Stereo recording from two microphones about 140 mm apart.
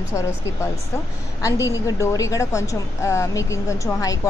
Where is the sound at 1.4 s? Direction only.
25° left (ahead or behind).